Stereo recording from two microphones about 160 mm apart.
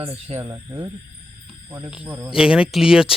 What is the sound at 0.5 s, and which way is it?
Speech, 15° right (ahead or behind).